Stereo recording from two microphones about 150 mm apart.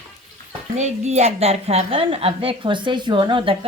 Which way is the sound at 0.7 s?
50° right (ahead or behind).